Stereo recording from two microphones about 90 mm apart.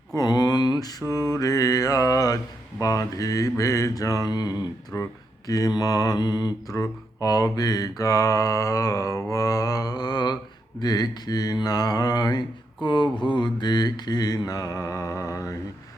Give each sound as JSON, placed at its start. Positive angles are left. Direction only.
{"t": 0.1, "sound": "mantra", "side_deg": 45}